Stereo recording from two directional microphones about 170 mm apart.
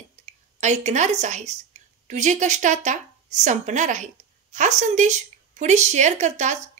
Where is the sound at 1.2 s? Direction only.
45° right (ahead or behind).